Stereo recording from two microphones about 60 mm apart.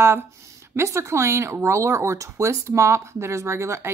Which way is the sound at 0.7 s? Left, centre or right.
Right.